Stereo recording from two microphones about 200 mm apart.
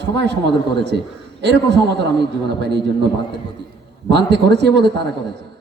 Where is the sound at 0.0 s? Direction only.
60° right (ahead or behind).